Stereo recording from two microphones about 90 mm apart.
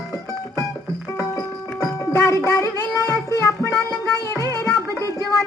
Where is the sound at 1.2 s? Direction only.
35° left (ahead or behind).